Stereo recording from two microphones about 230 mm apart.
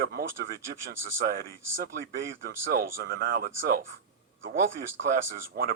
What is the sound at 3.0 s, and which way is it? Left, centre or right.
Speech, right.